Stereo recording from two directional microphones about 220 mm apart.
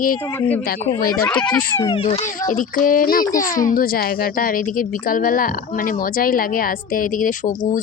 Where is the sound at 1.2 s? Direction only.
15° left (ahead or behind).